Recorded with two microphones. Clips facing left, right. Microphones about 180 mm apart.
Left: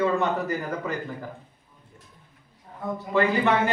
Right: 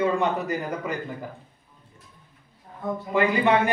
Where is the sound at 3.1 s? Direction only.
15° right (ahead or behind).